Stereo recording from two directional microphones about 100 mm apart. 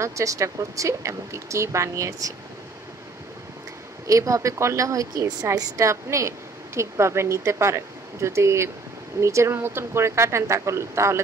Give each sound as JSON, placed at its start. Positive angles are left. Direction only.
{"t": 0.0, "sound": "speech", "side_deg": -30}
{"t": 4.1, "sound": "a woman's voice", "side_deg": -30}